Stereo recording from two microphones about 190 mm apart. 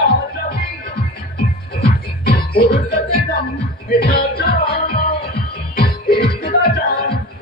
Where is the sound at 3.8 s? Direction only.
55° left (ahead or behind).